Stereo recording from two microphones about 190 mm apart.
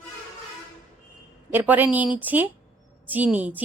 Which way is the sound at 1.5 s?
10° right (ahead or behind).